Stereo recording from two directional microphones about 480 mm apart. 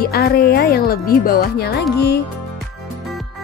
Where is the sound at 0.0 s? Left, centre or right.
Centre.